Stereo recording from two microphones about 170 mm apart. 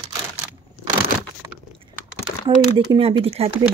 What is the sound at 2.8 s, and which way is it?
Speech, 35° right (ahead or behind).